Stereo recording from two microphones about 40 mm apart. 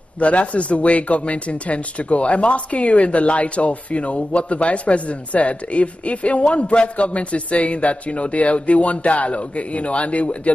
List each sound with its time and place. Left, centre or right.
0.2 s speech: left